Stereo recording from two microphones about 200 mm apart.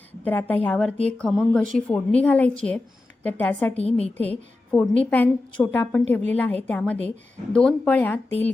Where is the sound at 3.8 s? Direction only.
30° left (ahead or behind).